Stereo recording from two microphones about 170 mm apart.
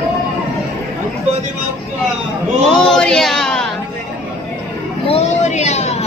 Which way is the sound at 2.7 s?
5° left (ahead or behind).